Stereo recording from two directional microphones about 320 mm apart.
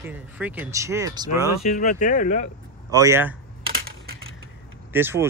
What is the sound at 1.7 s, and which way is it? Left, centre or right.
Speech, left.